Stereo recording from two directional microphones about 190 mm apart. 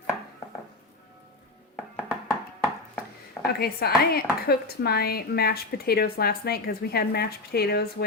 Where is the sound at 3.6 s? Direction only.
55° left (ahead or behind).